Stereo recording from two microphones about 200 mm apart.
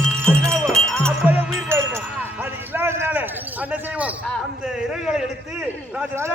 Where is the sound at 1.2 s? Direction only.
10° right (ahead or behind).